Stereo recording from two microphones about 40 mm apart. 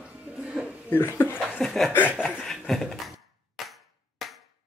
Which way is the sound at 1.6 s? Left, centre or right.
Centre.